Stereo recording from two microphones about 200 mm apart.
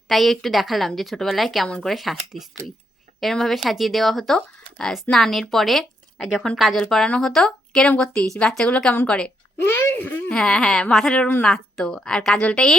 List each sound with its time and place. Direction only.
0.1 s speech: centre (ahead or behind)